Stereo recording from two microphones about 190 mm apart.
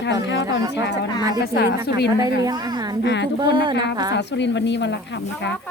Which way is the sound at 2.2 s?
20° right (ahead or behind).